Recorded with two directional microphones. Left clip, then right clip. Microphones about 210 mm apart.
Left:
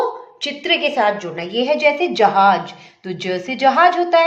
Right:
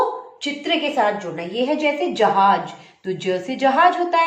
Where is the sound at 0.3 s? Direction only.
50° left (ahead or behind).